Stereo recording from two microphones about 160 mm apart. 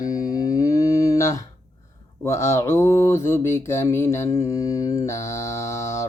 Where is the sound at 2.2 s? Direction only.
15° left (ahead or behind).